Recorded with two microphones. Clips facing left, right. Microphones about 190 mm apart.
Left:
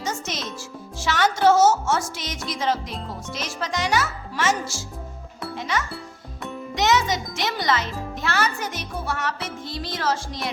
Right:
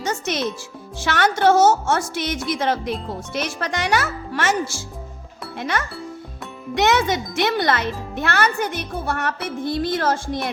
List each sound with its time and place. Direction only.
0.0 s music: 65° right (ahead or behind)
0.9 s a child's voice: 60° right (ahead or behind)